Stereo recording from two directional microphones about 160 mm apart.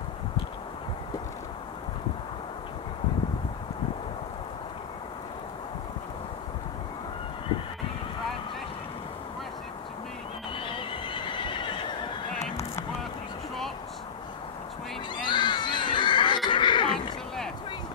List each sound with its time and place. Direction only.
10.5 s neigh: 30° left (ahead or behind)
15.2 s screaming: 30° left (ahead or behind)
16.4 s a sound: 30° left (ahead or behind)